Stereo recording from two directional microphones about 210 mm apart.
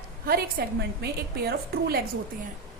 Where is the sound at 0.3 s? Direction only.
45° right (ahead or behind).